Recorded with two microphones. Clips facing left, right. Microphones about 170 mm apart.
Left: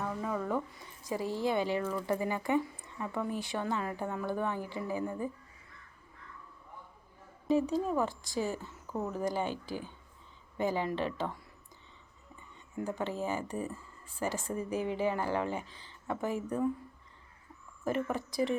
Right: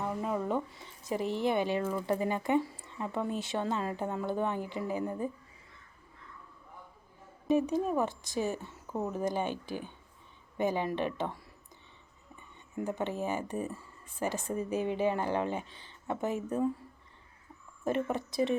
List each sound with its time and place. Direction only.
0.0 s a woman's voice: 20° right (ahead or behind)
7.4 s a woman's voice: 20° right (ahead or behind)
12.4 s a woman's voice: 20° right (ahead or behind)
17.8 s a woman's voice: 20° right (ahead or behind)